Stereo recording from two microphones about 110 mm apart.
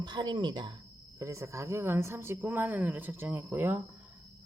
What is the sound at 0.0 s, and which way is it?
Speech, 45° right (ahead or behind).